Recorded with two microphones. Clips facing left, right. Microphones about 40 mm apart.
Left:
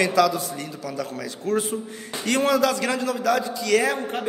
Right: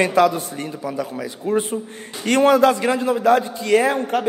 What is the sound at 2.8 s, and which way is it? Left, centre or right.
A man's voice, right.